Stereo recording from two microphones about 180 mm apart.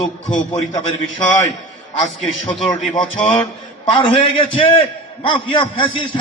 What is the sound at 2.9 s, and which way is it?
A man's voice, 25° left (ahead or behind).